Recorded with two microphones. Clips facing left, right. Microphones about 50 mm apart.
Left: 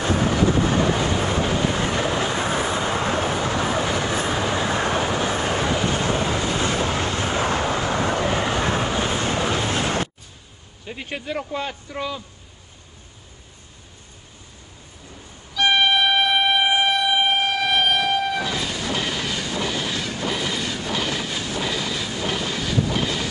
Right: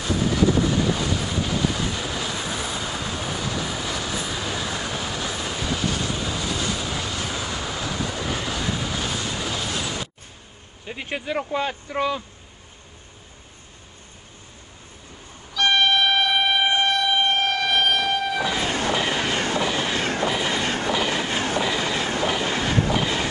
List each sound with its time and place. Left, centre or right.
0.0 s vehicle: left
10.9 s speech: centre
15.5 s train: centre
18.9 s train: right
19.3 s train: right
19.6 s train: right
20.0 s train: right
21.1 s train: right
21.5 s vehicle: right
22.4 s train: right